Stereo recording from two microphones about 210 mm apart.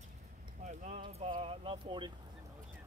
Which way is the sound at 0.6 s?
35° right (ahead or behind).